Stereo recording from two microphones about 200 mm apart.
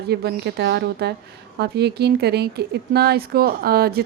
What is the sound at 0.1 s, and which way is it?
A woman's voice, 55° right (ahead or behind).